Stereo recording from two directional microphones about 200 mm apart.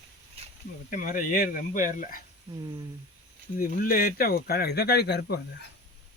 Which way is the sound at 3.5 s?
45° left (ahead or behind).